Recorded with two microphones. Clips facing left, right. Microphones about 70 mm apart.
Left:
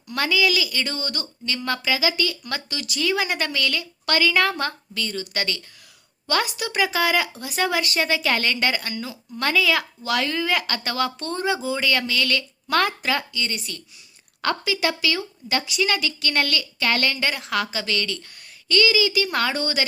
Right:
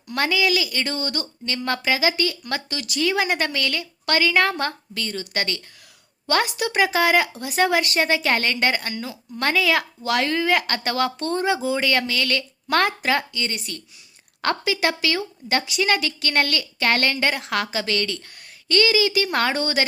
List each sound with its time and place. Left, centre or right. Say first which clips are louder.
0.1 s a woman's voice: even; right
6.2 s a woman's voice: right 2 dB; right
6.8 s a woman's voice: right 2 dB; right